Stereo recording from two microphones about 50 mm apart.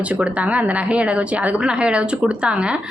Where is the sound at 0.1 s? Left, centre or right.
Right.